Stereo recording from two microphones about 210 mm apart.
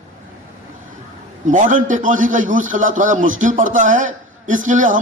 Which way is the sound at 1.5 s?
40° right (ahead or behind).